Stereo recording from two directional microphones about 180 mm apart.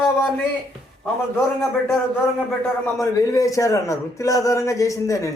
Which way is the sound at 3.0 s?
20° left (ahead or behind).